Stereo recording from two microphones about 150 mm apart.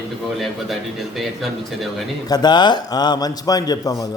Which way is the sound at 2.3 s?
30° left (ahead or behind).